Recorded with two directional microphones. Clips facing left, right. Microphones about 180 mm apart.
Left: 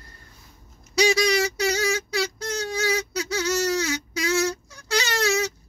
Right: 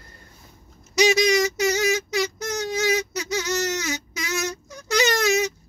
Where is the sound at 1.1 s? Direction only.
20° right (ahead or behind).